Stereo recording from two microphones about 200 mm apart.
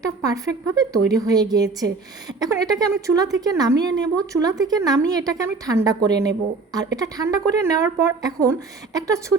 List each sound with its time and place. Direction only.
0.0 s a woman's voice: 15° right (ahead or behind)